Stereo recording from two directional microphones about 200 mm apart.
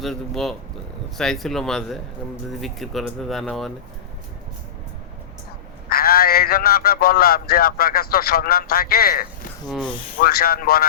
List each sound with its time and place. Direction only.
0.0 s speech: centre (ahead or behind)
5.9 s a man's voice: 50° left (ahead or behind)
9.6 s speech: 5° left (ahead or behind)
10.2 s a man's voice: 45° left (ahead or behind)